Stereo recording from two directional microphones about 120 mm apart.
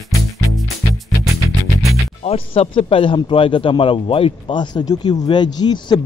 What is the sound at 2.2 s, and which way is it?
Speech, 55° left (ahead or behind).